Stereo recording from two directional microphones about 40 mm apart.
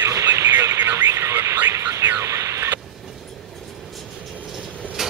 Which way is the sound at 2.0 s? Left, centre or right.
Right.